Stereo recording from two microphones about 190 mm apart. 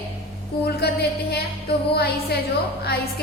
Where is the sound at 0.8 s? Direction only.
60° left (ahead or behind).